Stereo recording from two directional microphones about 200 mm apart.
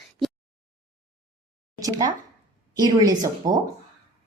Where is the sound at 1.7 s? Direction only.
15° right (ahead or behind).